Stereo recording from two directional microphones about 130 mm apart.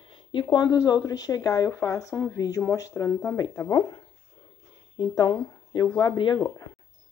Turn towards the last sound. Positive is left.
turn(degrees=20)  # may be behind; listen again after turning